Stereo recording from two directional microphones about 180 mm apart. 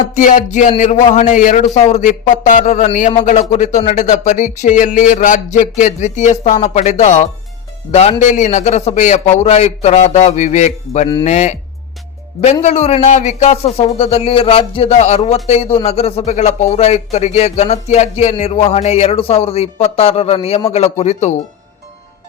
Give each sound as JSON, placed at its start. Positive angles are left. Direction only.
{"t": 0.1, "sound": "a man's voice", "side_deg": 45}
{"t": 12.6, "sound": "speech", "side_deg": 35}